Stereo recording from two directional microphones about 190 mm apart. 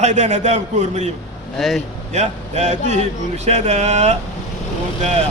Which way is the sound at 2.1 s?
35° right (ahead or behind).